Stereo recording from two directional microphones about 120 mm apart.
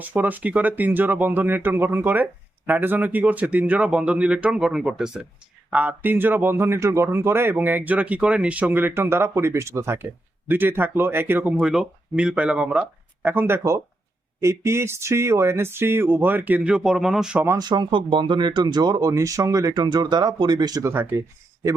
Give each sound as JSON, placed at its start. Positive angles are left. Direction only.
{"t": 0.0, "sound": "speech", "side_deg": -15}
{"t": 11.6, "sound": "speech", "side_deg": -5}
{"t": 17.6, "sound": "speech", "side_deg": -35}
{"t": 20.9, "sound": "speech", "side_deg": -20}